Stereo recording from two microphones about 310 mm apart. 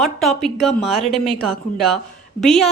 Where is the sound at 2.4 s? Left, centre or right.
Centre.